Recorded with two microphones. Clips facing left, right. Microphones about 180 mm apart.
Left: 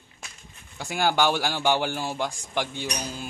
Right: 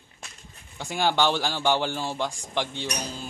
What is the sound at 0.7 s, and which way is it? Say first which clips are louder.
A man's voice: left 1 dB; 5° left (ahead or behind).